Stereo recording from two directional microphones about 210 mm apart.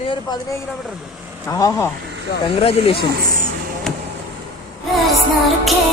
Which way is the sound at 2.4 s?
25° left (ahead or behind).